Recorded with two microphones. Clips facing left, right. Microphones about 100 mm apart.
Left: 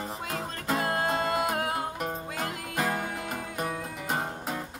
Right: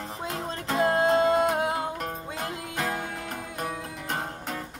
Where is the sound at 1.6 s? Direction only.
20° right (ahead or behind).